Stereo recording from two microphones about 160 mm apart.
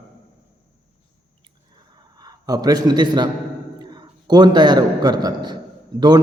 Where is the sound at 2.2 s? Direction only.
25° right (ahead or behind).